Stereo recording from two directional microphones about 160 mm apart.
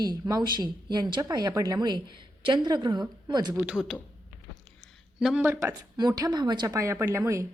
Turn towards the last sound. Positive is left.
turn(degrees=-15)  # may be behind; listen again after turning